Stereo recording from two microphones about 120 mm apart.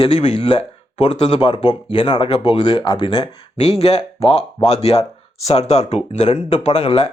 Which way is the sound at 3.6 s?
55° left (ahead or behind).